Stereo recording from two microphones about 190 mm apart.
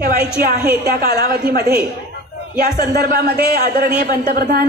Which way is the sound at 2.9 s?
50° right (ahead or behind).